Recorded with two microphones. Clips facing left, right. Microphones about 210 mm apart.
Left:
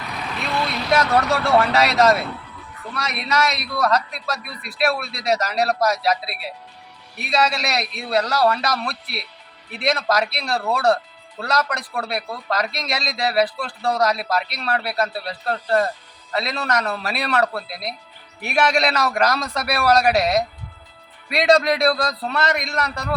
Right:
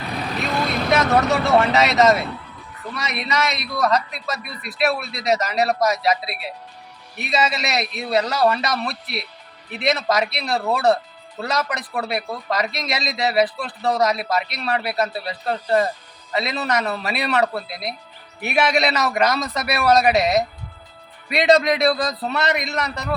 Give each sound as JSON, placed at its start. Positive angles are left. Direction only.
{"t": 0.1, "sound": "vehicle", "side_deg": -40}
{"t": 1.1, "sound": "speech", "side_deg": 0}